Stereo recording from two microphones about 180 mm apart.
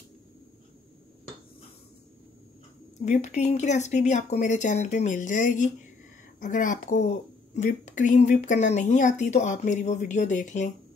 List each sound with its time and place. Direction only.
3.1 s speech: 40° left (ahead or behind)